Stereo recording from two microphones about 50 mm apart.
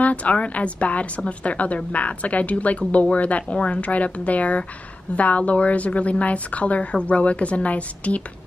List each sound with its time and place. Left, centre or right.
0.0 s a woman's voice: left